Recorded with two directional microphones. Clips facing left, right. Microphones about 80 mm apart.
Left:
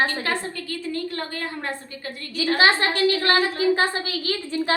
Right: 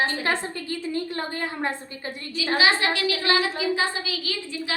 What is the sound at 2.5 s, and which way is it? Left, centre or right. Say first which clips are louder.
A woman's voice: left 2 dB; left.